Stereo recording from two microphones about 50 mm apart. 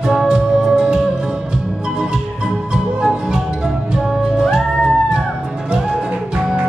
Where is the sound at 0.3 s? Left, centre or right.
Centre.